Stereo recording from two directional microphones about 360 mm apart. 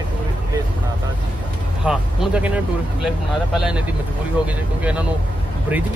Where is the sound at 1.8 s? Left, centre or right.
Centre.